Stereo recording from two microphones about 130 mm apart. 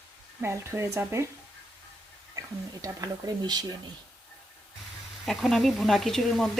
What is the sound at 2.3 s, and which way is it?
Speech, 25° right (ahead or behind).